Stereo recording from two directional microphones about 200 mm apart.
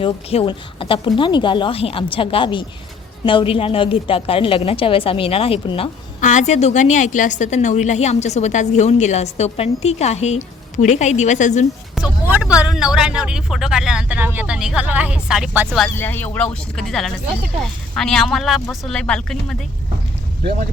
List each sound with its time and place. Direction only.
0.0 s a woman's voice: 30° left (ahead or behind)
6.1 s a woman's voice: 40° left (ahead or behind)
11.9 s speech: 5° right (ahead or behind)
15.8 s speech: 10° left (ahead or behind)